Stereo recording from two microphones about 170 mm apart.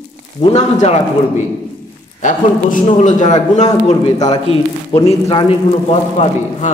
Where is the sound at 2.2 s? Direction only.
50° left (ahead or behind).